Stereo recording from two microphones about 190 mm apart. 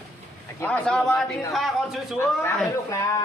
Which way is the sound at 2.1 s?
15° left (ahead or behind).